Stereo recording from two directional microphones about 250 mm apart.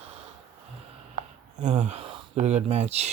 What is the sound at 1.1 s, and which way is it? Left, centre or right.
Speech, right.